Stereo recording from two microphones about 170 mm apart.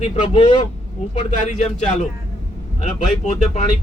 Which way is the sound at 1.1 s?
45° left (ahead or behind).